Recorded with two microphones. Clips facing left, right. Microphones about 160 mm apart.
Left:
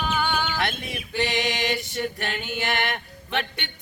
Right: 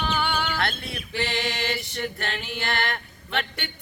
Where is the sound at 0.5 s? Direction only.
15° left (ahead or behind).